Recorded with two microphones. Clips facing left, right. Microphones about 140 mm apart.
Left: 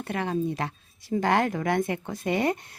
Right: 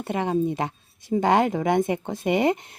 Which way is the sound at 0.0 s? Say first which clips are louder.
Right 4 dB; 20° right (ahead or behind).